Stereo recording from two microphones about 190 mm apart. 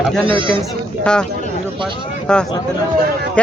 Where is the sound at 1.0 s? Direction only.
5° left (ahead or behind).